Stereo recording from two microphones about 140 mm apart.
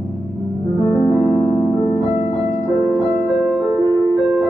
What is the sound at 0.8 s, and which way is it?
Music, 20° left (ahead or behind).